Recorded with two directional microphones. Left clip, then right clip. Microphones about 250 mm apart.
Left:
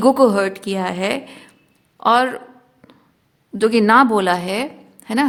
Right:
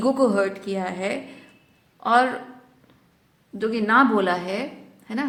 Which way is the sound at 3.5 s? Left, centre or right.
Left.